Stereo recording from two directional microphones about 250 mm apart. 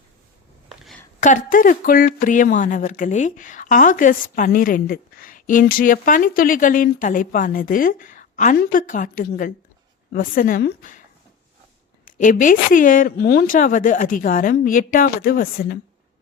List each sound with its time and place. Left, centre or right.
0.7 s a sound: centre
1.2 s speech: left
12.0 s speech: left